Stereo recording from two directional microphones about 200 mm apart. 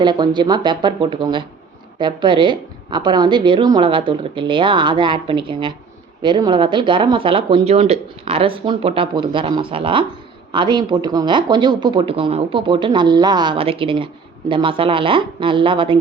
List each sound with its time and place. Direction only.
0.0 s speech: 20° right (ahead or behind)